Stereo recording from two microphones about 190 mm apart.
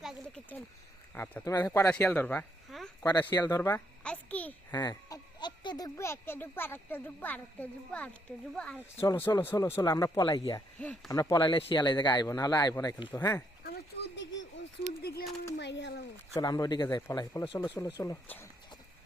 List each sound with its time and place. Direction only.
0.0 s a sound: centre (ahead or behind)
1.1 s speech: 10° left (ahead or behind)
3.0 s speech: 20° left (ahead or behind)
4.0 s speech: 5° left (ahead or behind)
4.7 s speech: 20° left (ahead or behind)
10.8 s speech: 5° left (ahead or behind)
11.1 s speech: 20° left (ahead or behind)
13.7 s a sound: 60° left (ahead or behind)
15.0 s speech: 55° left (ahead or behind)
15.5 s speech: 65° left (ahead or behind)
16.3 s speech: 20° left (ahead or behind)